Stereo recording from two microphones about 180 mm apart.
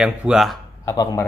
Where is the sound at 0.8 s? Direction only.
20° left (ahead or behind).